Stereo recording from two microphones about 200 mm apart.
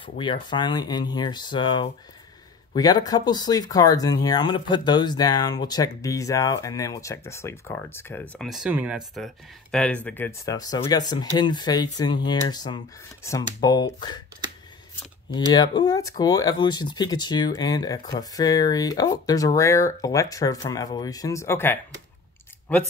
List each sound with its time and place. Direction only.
0.2 s speech: 25° left (ahead or behind)
15.5 s speech: 20° left (ahead or behind)